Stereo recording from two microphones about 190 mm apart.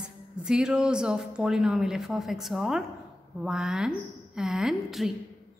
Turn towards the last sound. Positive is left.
turn(degrees=0)  # may be behind; listen again after turning